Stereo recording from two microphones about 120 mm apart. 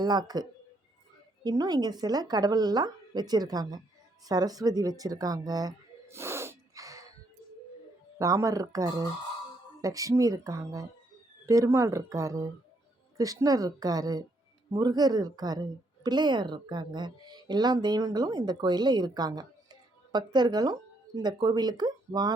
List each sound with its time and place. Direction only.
0.0 s speech: 35° right (ahead or behind)
1.5 s a woman's voice: 35° right (ahead or behind)
4.3 s a sound: 30° right (ahead or behind)
8.2 s a woman's voice: 30° right (ahead or behind)